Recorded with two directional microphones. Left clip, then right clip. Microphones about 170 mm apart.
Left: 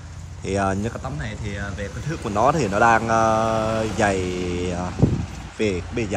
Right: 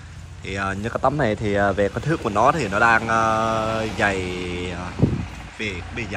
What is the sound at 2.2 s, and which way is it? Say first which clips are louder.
Speech: even; 5° left (ahead or behind).